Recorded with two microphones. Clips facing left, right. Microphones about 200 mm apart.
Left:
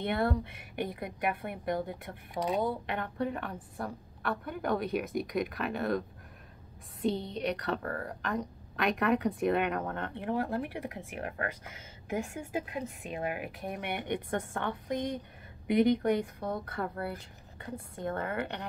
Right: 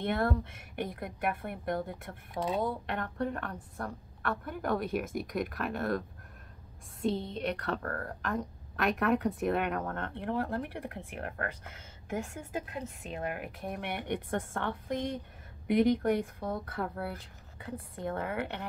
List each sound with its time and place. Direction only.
0.0 s a woman's voice: centre (ahead or behind)
2.3 s speech: 15° left (ahead or behind)
2.6 s a woman's voice: centre (ahead or behind)